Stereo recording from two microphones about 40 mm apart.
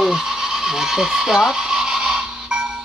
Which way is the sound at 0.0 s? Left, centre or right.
Centre.